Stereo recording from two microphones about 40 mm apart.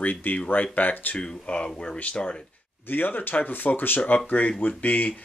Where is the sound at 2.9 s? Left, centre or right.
Left.